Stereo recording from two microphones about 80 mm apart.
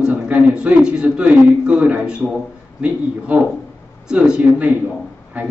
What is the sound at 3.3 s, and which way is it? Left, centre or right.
A man's voice, right.